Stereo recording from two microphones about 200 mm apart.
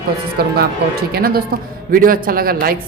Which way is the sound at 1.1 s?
50° right (ahead or behind).